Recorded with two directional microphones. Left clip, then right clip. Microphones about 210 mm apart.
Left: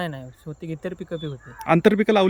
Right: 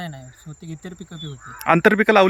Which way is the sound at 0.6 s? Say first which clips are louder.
Left 6 dB; 35° left (ahead or behind).